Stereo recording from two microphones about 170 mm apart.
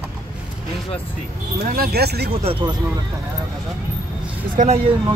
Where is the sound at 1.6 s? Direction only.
60° right (ahead or behind).